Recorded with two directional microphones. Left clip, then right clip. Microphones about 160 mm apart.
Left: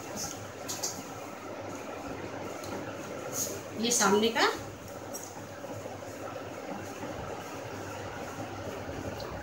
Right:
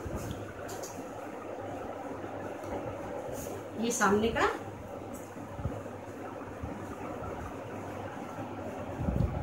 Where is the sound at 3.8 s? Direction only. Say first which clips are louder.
Left 2 dB; 20° right (ahead or behind).